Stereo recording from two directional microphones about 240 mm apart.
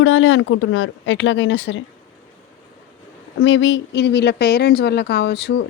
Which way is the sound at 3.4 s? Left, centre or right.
Left.